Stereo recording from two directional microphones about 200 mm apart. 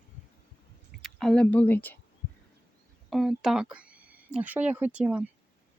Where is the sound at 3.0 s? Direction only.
Centre (ahead or behind).